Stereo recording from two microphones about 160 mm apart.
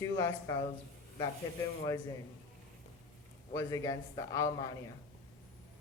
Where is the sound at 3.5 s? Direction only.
20° left (ahead or behind).